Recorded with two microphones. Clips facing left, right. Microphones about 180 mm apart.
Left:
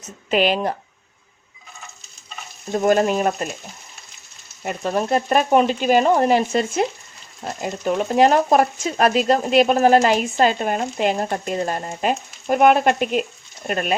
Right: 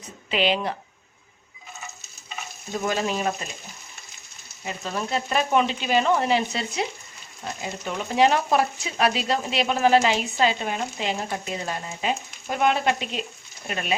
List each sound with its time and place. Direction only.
0.3 s speech: 45° left (ahead or behind)
2.7 s speech: 50° left (ahead or behind)
4.6 s speech: 55° left (ahead or behind)